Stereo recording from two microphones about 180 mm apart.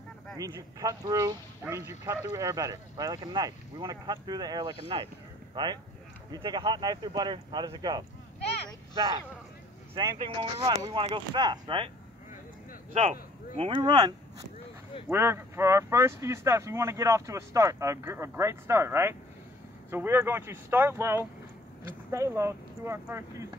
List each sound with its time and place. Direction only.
0.4 s speech: 20° right (ahead or behind)
9.9 s speech: 25° right (ahead or behind)
12.9 s speech: 40° right (ahead or behind)
13.7 s speech: 25° right (ahead or behind)
15.0 s speech: 15° right (ahead or behind)